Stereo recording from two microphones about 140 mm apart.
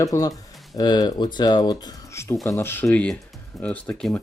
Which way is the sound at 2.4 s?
20° left (ahead or behind).